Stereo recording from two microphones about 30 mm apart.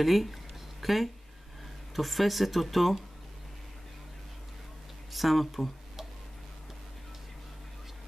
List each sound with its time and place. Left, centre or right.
0.0 s a sound: centre
2.0 s speech: centre
5.1 s speech: centre